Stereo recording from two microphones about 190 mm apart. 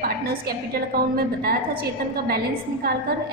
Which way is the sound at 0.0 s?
50° right (ahead or behind).